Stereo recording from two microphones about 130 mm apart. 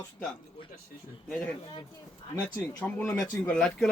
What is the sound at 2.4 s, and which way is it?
Speech, 10° left (ahead or behind).